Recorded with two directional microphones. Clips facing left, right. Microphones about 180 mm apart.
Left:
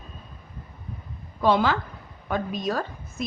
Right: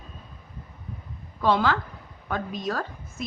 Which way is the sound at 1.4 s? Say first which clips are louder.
Left 1 dB; 15° left (ahead or behind).